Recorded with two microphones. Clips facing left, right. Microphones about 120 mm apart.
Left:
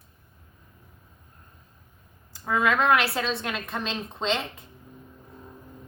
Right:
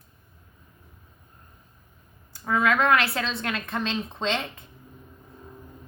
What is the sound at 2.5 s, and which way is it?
Speech, 5° left (ahead or behind).